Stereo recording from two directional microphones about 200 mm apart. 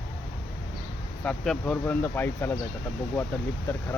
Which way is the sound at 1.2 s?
5° left (ahead or behind).